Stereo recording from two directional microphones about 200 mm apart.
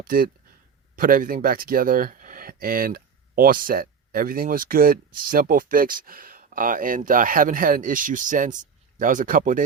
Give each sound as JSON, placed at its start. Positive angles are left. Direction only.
{"t": 0.0, "sound": "speech", "side_deg": -45}